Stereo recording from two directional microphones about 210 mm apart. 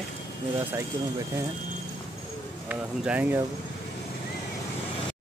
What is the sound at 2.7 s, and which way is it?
Speech, 5° right (ahead or behind).